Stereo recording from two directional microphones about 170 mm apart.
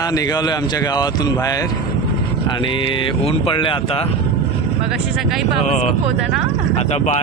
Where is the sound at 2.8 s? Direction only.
30° left (ahead or behind).